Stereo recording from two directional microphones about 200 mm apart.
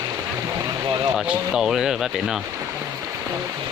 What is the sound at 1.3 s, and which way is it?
Speech, 5° right (ahead or behind).